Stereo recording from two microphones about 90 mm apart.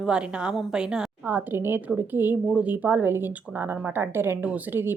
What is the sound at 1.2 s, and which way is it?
A woman's voice, 20° right (ahead or behind).